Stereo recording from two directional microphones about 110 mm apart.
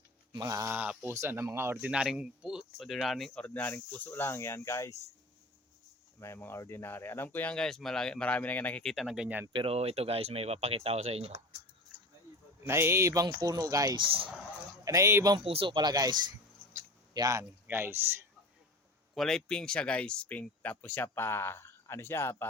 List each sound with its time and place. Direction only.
0.3 s speech: 30° right (ahead or behind)
0.7 s speech: 15° right (ahead or behind)
1.9 s speech: 10° right (ahead or behind); by 4.9 s 25° left (ahead or behind)
6.1 s speech: 25° left (ahead or behind); by 9.4 s 5° right (ahead or behind)
9.5 s speech: 50° right (ahead or behind)
9.7 s speech: 65° right (ahead or behind)
12.6 s speech: 25° right (ahead or behind)
13.9 s speech: 55° right (ahead or behind)
14.8 s speech: 30° right (ahead or behind)
15.4 s speech: 55° right (ahead or behind)
17.2 s speech: 30° right (ahead or behind)
19.1 s speech: 5° left (ahead or behind); by 22.4 s 20° left (ahead or behind)